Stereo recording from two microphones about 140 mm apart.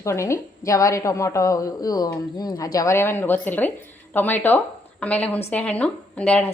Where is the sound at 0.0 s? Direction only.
20° left (ahead or behind).